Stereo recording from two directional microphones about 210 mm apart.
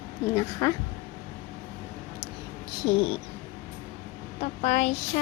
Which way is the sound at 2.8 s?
20° left (ahead or behind).